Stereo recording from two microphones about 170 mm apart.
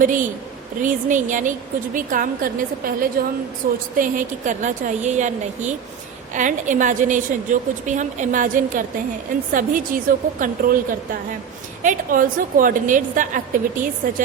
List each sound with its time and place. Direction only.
0.0 s a woman's voice: 50° right (ahead or behind)